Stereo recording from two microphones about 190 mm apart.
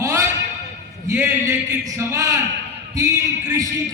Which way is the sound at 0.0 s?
15° right (ahead or behind).